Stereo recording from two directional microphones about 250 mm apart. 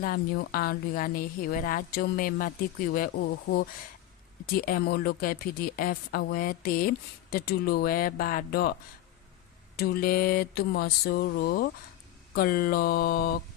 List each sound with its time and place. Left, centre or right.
0.0 s speech: left
9.7 s speech: left